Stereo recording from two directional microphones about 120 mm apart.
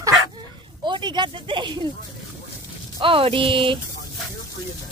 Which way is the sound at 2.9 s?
50° right (ahead or behind).